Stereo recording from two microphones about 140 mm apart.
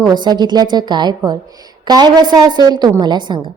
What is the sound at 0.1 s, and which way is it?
A woman's voice, 30° right (ahead or behind).